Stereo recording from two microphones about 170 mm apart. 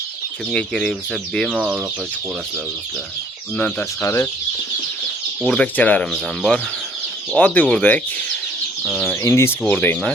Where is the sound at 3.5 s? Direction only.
10° left (ahead or behind).